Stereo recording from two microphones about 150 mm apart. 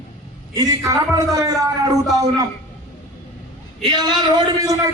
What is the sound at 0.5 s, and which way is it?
Speech, 25° right (ahead or behind).